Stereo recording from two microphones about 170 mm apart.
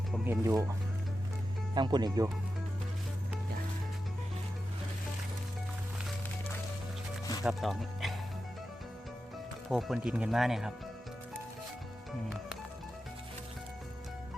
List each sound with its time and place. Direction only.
0.3 s speech: 15° right (ahead or behind)
1.7 s speech: 25° right (ahead or behind)
7.4 s speech: centre (ahead or behind)
9.6 s speech: centre (ahead or behind)